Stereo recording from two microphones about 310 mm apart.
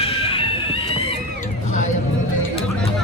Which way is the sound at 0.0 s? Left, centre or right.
Centre.